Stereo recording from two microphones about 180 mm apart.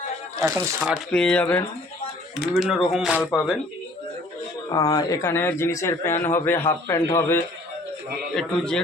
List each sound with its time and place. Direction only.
0.3 s speech: 15° right (ahead or behind)
0.8 s speech: centre (ahead or behind)
2.3 s speech: 5° right (ahead or behind)
3.2 s speech: 10° left (ahead or behind)
4.7 s speech: 20° left (ahead or behind)
8.4 s speech: 5° left (ahead or behind)